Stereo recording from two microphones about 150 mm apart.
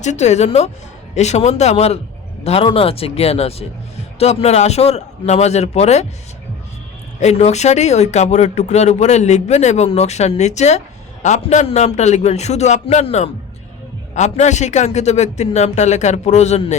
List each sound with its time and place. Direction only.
0.0 s speech: 50° left (ahead or behind)
7.2 s speech: 45° left (ahead or behind)